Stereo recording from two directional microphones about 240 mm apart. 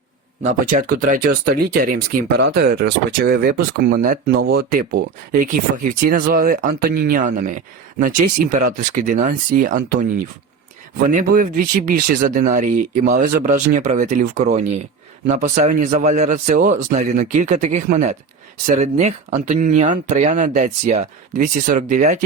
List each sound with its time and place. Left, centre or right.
0.4 s speech: right
11.1 s speech: right